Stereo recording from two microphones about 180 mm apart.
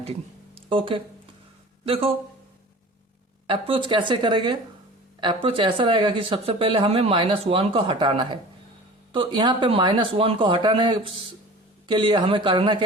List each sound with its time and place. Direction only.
0.5 s speech: 30° right (ahead or behind)
3.4 s speech: 30° right (ahead or behind)